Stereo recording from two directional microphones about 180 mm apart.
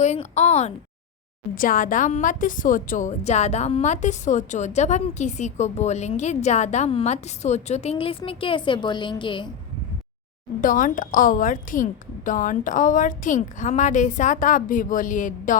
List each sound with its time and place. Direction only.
0.0 s a woman's voice: 40° left (ahead or behind)
1.5 s a woman's voice: 50° left (ahead or behind); by 9.5 s 25° left (ahead or behind)
10.6 s a woman's voice: 50° left (ahead or behind)